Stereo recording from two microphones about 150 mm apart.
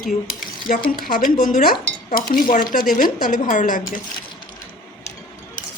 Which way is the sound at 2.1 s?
75° left (ahead or behind).